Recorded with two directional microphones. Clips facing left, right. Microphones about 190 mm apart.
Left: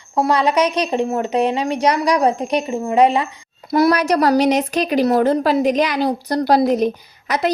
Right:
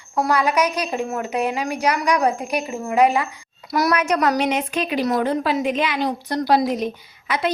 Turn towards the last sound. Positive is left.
turn(degrees=40)  # may be behind; listen again after turning